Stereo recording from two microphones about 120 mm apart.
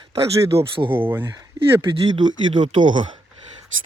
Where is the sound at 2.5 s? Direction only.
40° right (ahead or behind).